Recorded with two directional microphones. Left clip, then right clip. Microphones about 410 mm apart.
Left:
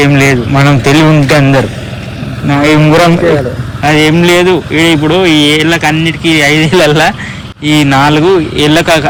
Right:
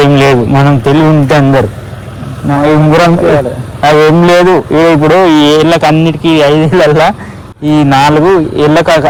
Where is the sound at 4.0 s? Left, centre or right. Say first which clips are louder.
Right 1 dB; right.